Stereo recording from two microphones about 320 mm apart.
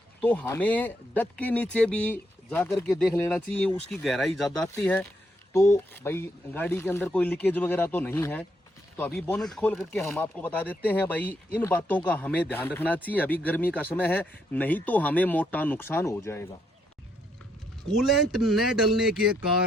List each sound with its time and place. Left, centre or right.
0.2 s speech: centre
18.0 s speech: centre